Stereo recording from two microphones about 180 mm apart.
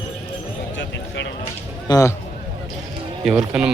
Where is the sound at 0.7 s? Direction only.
80° left.